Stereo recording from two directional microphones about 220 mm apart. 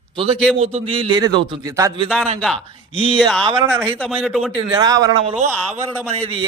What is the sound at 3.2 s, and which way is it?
A man's voice, 5° left (ahead or behind).